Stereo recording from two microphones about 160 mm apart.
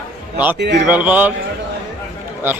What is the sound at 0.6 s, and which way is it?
Speech, 90° right.